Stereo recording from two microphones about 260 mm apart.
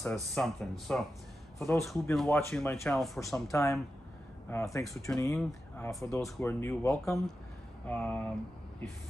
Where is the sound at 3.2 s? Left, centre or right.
Centre.